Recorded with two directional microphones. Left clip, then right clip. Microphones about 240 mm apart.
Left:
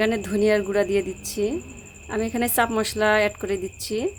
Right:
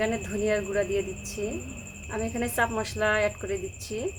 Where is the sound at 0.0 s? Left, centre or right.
Left.